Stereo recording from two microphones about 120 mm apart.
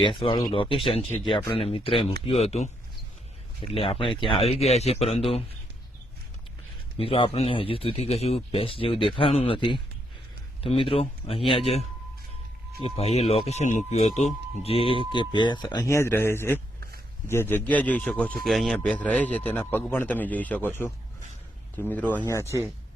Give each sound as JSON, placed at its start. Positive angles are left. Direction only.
{"t": 0.0, "sound": "speech", "side_deg": 45}
{"t": 3.6, "sound": "speech", "side_deg": 50}
{"t": 6.9, "sound": "speech", "side_deg": 50}
{"t": 15.1, "sound": "speech", "side_deg": 40}
{"t": 18.3, "sound": "speech", "side_deg": 0}
{"t": 18.8, "sound": "speech", "side_deg": 10}